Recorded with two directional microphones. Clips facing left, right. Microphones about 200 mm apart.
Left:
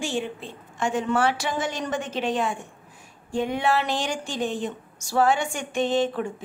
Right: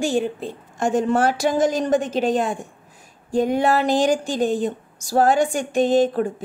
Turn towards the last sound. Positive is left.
turn(degrees=-40)  # may be behind; listen again after turning